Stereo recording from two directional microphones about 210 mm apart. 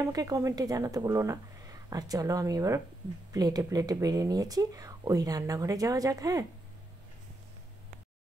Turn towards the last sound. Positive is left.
turn(degrees=-15)  # may be behind; listen again after turning